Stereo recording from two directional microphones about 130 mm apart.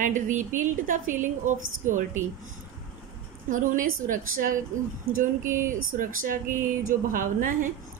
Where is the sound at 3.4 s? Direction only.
90° right.